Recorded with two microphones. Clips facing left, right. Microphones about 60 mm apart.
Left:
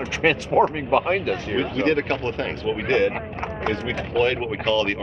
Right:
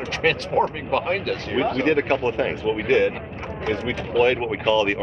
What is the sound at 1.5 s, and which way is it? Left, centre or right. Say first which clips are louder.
Speech: right 2 dB; centre.